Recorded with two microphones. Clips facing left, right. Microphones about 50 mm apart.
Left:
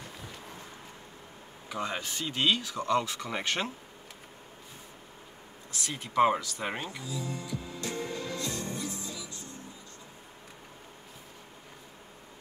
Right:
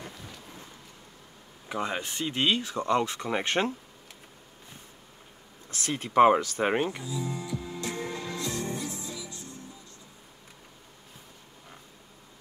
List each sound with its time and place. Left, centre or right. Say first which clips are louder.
1.7 s speech: right 3 dB; right
5.7 s speech: right 5 dB; right
6.6 s music: right 8 dB; right